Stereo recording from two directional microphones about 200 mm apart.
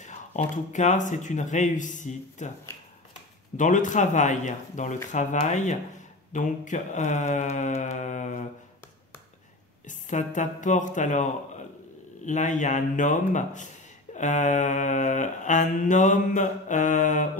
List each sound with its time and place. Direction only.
0.0 s mantra: 35° left (ahead or behind)
3.5 s mantra: 40° left (ahead or behind)
9.8 s mantra: 40° left (ahead or behind)
12.3 s mantra: 40° left (ahead or behind)